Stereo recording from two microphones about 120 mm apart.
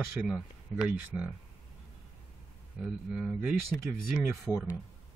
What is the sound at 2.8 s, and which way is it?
Speech, 5° right (ahead or behind).